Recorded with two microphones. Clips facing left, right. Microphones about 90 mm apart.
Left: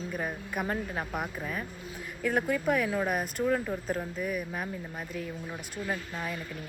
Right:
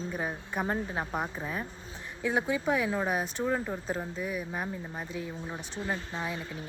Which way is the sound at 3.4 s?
15° right (ahead or behind).